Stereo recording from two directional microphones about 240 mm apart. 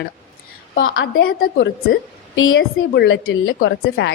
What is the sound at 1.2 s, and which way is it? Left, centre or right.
Speech, left.